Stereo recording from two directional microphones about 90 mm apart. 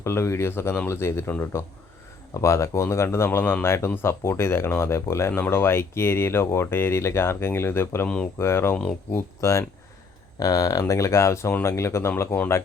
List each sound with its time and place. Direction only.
0.0 s speech: 30° left (ahead or behind)
8.0 s speech: 10° left (ahead or behind)
8.4 s speech: 30° left (ahead or behind)
8.7 s speech: 10° left (ahead or behind)
9.1 s speech: 35° left (ahead or behind)